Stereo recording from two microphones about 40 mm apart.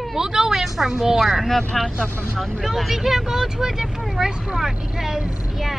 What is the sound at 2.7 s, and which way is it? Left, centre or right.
Speech, centre.